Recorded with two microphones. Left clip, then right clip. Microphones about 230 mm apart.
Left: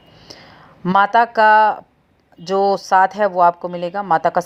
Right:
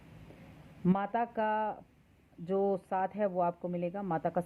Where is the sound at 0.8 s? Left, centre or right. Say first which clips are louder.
Left 19 dB; centre.